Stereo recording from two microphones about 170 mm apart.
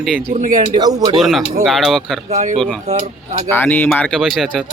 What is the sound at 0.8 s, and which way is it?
Speech, 25° right (ahead or behind).